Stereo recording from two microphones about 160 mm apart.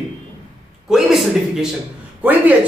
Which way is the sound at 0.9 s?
Centre (ahead or behind).